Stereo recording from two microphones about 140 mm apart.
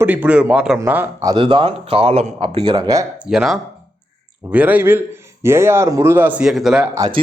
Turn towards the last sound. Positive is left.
turn(degrees=-5)  # may be behind; listen again after turning